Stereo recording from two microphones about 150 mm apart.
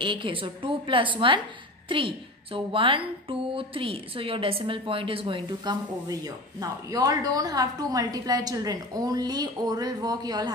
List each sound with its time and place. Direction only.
0.0 s a woman's voice: 35° right (ahead or behind)